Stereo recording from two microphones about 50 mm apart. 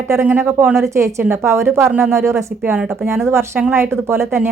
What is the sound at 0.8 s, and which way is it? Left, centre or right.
Speech, right.